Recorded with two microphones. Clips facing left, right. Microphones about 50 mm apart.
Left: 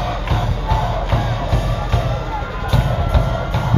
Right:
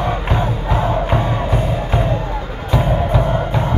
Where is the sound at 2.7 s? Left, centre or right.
Centre.